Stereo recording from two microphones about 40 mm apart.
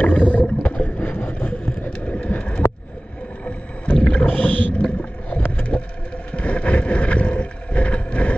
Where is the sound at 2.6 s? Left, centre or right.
Left.